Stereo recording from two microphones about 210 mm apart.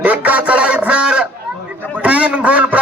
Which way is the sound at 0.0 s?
5° right (ahead or behind).